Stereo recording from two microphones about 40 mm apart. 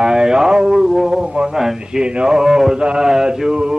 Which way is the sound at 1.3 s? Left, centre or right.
Right.